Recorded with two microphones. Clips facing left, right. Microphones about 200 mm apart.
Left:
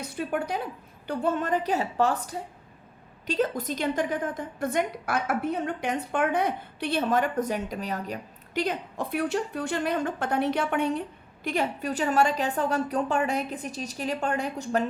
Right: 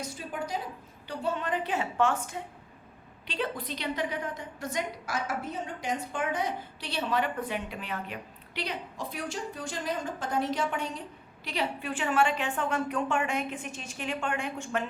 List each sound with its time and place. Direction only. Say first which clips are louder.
0.0 s a woman's voice: left 6 dB; 60° left (ahead or behind)
11.4 s a woman's voice: left 5 dB; 50° left (ahead or behind)